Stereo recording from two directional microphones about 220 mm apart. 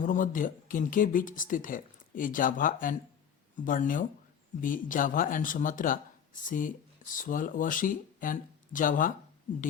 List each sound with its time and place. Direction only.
0.0 s speech: 35° left (ahead or behind)